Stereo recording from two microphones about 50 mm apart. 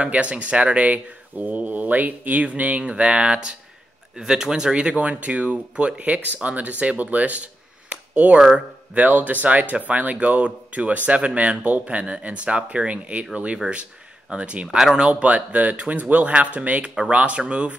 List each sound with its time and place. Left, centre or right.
0.0 s speech: right
7.9 s chop: right
8.5 s speech: right